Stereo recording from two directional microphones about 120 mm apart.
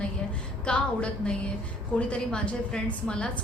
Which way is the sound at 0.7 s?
10° left (ahead or behind).